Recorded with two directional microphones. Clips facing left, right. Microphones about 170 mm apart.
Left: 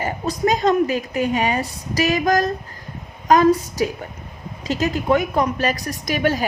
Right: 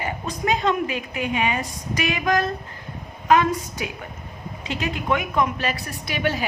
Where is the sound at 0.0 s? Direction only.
40° left (ahead or behind).